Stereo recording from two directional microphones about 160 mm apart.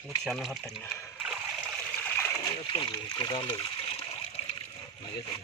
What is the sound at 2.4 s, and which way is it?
Water, 30° left (ahead or behind).